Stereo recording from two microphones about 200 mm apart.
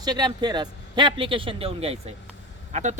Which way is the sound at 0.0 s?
20° right (ahead or behind).